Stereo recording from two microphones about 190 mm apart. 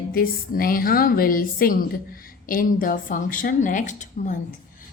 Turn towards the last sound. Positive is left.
turn(degrees=40)  # may be behind; listen again after turning